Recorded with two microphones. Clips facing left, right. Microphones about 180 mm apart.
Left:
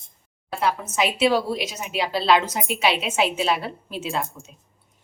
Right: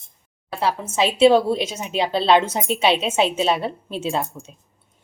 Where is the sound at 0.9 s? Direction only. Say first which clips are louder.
Right 8 dB; 30° right (ahead or behind).